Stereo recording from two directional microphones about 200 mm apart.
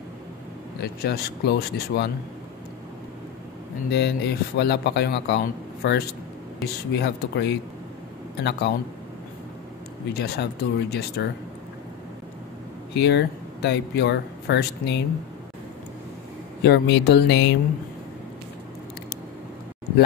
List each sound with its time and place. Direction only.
1.0 s speech: 55° left (ahead or behind)
3.9 s speech: 55° left (ahead or behind)
10.1 s speech: 55° left (ahead or behind)
12.9 s speech: 55° left (ahead or behind)
16.6 s speech: 55° left (ahead or behind)